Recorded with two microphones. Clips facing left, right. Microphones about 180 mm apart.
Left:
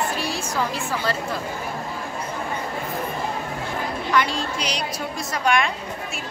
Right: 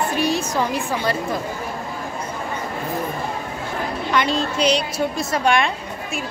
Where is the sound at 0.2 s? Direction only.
20° right (ahead or behind).